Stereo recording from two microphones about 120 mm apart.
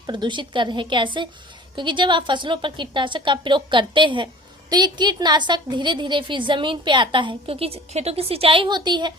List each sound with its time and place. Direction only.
0.1 s a woman's voice: 40° right (ahead or behind)